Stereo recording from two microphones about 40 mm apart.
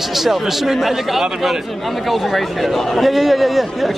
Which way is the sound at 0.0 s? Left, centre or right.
Centre.